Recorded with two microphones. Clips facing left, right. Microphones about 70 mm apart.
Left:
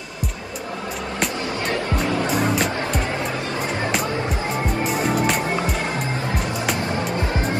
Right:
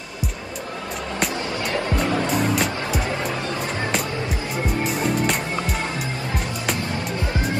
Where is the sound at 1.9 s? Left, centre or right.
Right.